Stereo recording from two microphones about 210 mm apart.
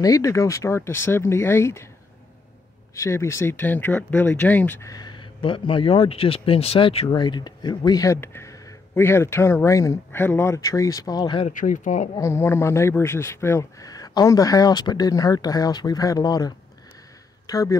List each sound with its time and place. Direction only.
0.0 s speech: 15° left (ahead or behind)
2.9 s speech: 15° left (ahead or behind)
11.5 s speech: 40° left (ahead or behind)
12.2 s speech: 15° left (ahead or behind)